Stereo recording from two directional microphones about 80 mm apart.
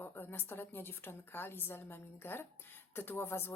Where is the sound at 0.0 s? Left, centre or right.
Left.